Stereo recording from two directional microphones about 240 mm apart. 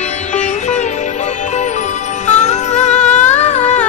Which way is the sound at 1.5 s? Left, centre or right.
Left.